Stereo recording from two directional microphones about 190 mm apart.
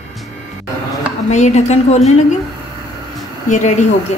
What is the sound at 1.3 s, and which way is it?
Speech, 35° left (ahead or behind).